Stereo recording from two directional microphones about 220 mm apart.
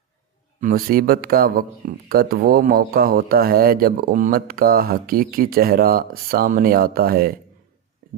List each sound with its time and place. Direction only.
0.6 s a man's voice: 40° right (ahead or behind)